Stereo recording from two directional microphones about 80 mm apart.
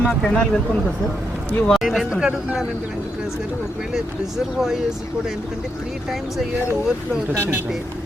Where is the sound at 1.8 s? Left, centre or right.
Centre.